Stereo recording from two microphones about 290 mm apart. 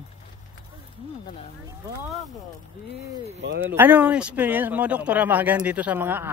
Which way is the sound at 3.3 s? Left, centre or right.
Right.